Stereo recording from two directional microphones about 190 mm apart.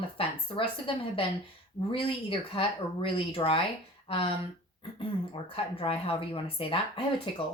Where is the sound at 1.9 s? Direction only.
25° left (ahead or behind).